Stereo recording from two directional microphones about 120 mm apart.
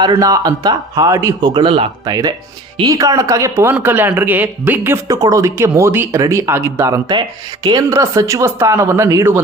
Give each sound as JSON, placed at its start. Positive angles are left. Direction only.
{"t": 0.2, "sound": "speech", "side_deg": -30}
{"t": 2.0, "sound": "speech", "side_deg": -30}
{"t": 5.0, "sound": "speech", "side_deg": -30}
{"t": 7.6, "sound": "speech", "side_deg": -35}